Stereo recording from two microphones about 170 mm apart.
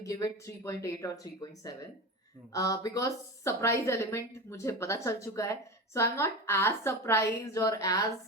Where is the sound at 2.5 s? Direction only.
20° left (ahead or behind).